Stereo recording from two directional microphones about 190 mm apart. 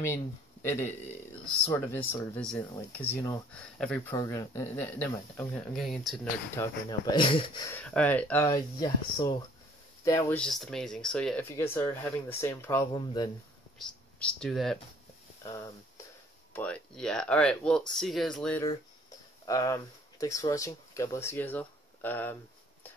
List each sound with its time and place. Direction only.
0.0 s speech: 15° left (ahead or behind)
2.3 s speech: 10° left (ahead or behind)
4.1 s speech: 15° left (ahead or behind); by 6.2 s centre (ahead or behind)
6.5 s speech: 20° left (ahead or behind)
7.7 s speech: 5° left (ahead or behind)
10.4 s speech: centre (ahead or behind); by 13.3 s 20° left (ahead or behind)
13.7 s speech: 5° left (ahead or behind)
16.5 s speech: 5° left (ahead or behind)
19.4 s speech: 20° left (ahead or behind)